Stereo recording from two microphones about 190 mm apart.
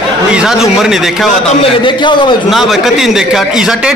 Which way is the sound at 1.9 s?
25° left (ahead or behind).